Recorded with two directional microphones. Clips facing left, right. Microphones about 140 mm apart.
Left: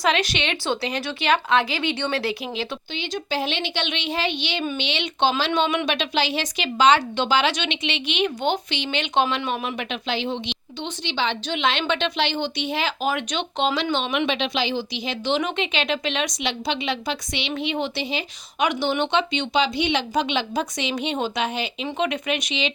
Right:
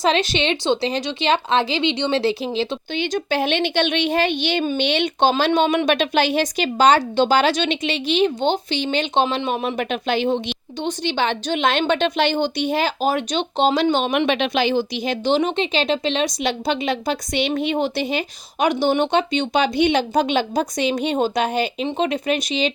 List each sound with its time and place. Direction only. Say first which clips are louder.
0.0 s speech: right 4 dB; 30° right (ahead or behind)
2.9 s a woman's voice: right 6 dB; 50° right (ahead or behind)
9.2 s speech: right 3 dB; 25° right (ahead or behind)
9.5 s a woman's voice: right 5 dB; 35° right (ahead or behind)
18.6 s a woman's voice: right 4 dB; 40° right (ahead or behind)
21.8 s speech: even; 35° right (ahead or behind)